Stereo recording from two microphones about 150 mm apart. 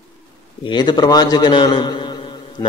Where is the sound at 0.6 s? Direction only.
30° left (ahead or behind).